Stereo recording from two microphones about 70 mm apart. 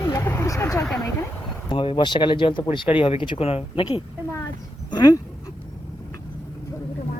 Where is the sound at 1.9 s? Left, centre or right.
Left.